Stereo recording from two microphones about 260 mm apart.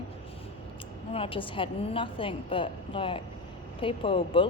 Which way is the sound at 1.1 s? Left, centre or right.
Left.